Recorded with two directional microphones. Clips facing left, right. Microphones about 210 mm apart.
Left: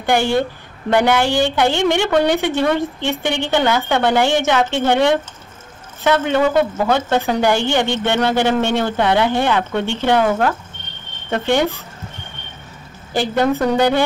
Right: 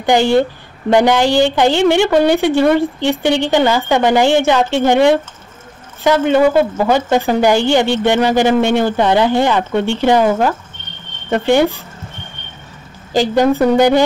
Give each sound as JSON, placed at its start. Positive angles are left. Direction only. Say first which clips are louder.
{"t": 0.0, "sound": "a woman's voice", "louder": "right 5 dB", "side_deg": -15}
{"t": 6.3, "sound": "a woman's voice", "louder": "right 4 dB", "side_deg": -10}
{"t": 13.4, "sound": "a woman's voice", "louder": "right 4 dB", "side_deg": -10}